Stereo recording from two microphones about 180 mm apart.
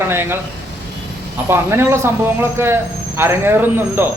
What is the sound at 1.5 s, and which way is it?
Speech, 15° right (ahead or behind).